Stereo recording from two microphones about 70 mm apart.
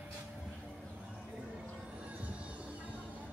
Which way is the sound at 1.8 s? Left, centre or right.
Centre.